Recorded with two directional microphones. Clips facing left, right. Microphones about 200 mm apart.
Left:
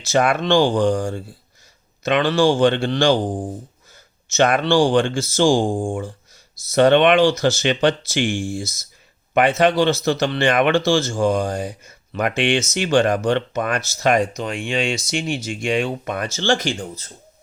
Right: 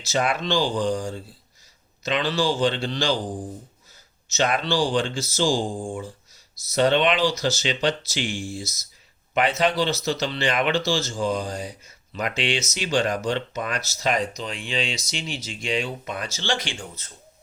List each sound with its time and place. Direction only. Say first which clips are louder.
0.0 s speech: left 6 dB; 55° left (ahead or behind)